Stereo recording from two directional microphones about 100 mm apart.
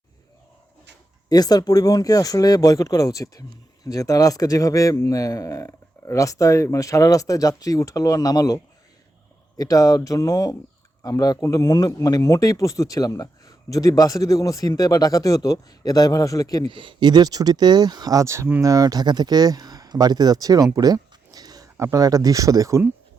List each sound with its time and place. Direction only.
1.3 s speech: 40° left (ahead or behind)
16.6 s speech: 55° right (ahead or behind); by 20.7 s 40° right (ahead or behind)
20.7 s a sound: 40° right (ahead or behind)
21.9 s speech: 35° right (ahead or behind)